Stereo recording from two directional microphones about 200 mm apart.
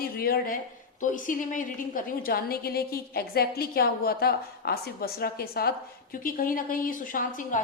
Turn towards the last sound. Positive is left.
turn(degrees=40)  # may be behind; listen again after turning